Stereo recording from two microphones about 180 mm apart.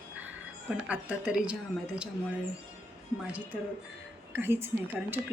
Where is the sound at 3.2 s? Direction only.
5° right (ahead or behind).